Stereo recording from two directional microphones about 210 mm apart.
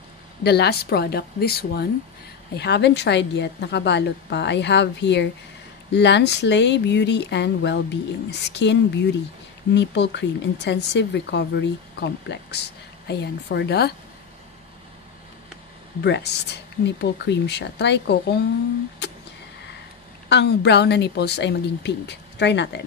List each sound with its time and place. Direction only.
0.4 s speech: 50° left (ahead or behind)
16.0 s speech: 55° left (ahead or behind)
19.0 s a sound: 55° left (ahead or behind)
20.2 s speech: 55° left (ahead or behind)